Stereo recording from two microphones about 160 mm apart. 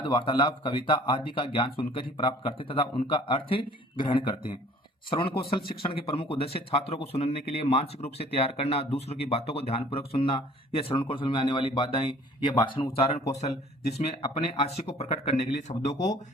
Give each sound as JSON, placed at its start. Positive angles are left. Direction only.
{"t": 0.0, "sound": "a man's voice", "side_deg": 30}